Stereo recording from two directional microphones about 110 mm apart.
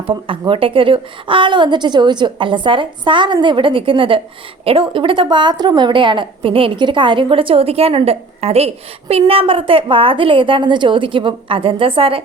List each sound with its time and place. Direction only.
0.0 s a woman's voice: 55° right (ahead or behind)